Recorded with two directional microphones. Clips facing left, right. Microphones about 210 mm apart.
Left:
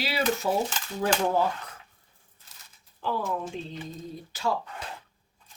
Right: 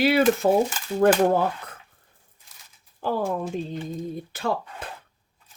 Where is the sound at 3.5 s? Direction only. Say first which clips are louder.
Right 7 dB; 55° right (ahead or behind).